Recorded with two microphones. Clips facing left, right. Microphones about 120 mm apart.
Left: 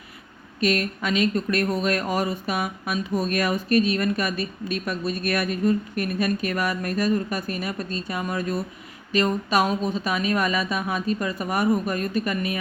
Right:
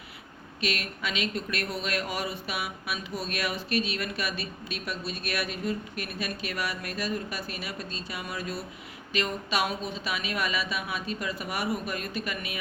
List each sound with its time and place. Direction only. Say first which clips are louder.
0.6 s speech: left 9 dB; 45° left (ahead or behind)